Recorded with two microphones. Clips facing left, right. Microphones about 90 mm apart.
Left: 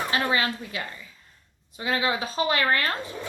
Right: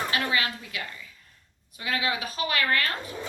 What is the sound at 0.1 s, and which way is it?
Speech, 30° left (ahead or behind).